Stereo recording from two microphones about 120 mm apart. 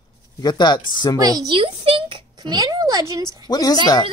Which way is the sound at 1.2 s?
35° right (ahead or behind).